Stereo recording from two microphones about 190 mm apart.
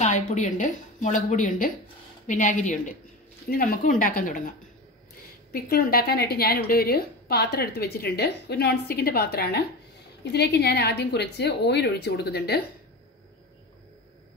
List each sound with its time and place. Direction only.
0.0 s a woman's voice: 40° left (ahead or behind)
5.5 s a woman's voice: 50° left (ahead or behind)